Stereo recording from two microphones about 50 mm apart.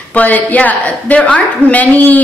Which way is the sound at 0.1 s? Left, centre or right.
Left.